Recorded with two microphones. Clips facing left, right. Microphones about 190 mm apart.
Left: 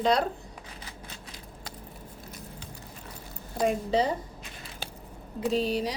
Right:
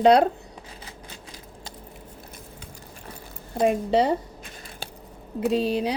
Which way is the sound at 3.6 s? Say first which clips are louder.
Right 5 dB; 65° right (ahead or behind).